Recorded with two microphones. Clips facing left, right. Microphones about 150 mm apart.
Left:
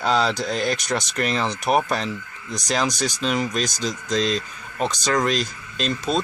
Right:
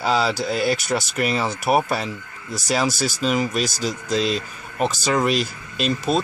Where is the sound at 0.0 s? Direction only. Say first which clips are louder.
Even; 5° right (ahead or behind).